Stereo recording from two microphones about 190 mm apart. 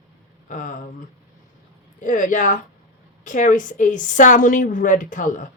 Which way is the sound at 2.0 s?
45° left (ahead or behind).